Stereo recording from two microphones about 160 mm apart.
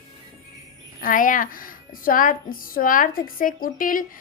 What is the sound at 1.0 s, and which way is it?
A woman's voice, 60° left (ahead or behind).